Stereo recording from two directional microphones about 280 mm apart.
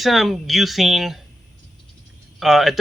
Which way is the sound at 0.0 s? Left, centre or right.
Centre.